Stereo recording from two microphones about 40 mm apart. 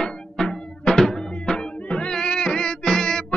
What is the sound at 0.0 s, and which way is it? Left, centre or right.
Music, centre.